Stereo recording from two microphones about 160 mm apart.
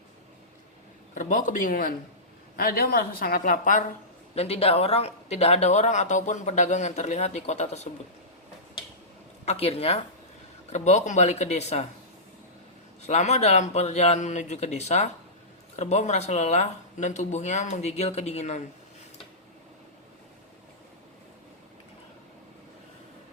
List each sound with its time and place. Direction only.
1.1 s speech: 55° left (ahead or behind)
2.6 s a woman's voice: 70° left (ahead or behind)
4.4 s speech: 40° left (ahead or behind)
9.5 s speech: 40° left (ahead or behind)
13.0 s speech: 45° left (ahead or behind)